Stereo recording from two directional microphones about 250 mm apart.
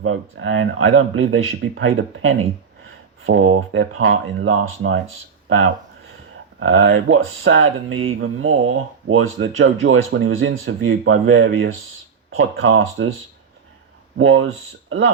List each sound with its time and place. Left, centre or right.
0.0 s speech: right
14.2 s speech: right